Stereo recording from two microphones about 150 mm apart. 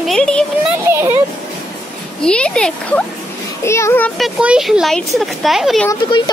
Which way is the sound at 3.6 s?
20° left (ahead or behind).